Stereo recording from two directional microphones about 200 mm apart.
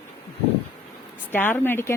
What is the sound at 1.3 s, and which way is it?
Speech, 10° left (ahead or behind).